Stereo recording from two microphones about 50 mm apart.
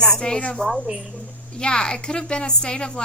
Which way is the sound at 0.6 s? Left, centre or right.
Centre.